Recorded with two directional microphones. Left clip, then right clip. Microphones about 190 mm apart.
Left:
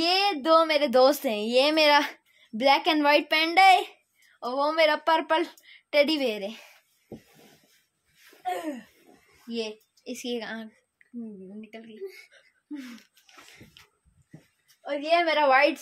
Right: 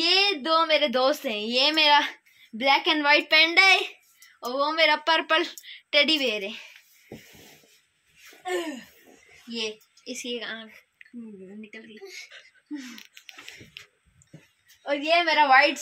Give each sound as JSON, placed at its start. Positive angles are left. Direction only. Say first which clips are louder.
{"t": 0.0, "sound": "a woman's voice", "louder": "right 2 dB", "side_deg": 65}
{"t": 9.5, "sound": "a woman's voice", "louder": "right 1 dB", "side_deg": 70}
{"t": 11.7, "sound": "a woman's voice", "louder": "left 3 dB", "side_deg": 50}
{"t": 14.9, "sound": "a woman's voice", "louder": "right 1 dB", "side_deg": 45}